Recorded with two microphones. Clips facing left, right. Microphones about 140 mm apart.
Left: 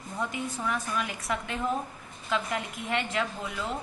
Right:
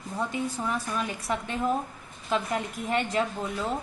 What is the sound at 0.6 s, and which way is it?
A woman's voice, 30° right (ahead or behind).